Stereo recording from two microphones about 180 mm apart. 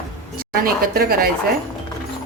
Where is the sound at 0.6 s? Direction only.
55° right (ahead or behind).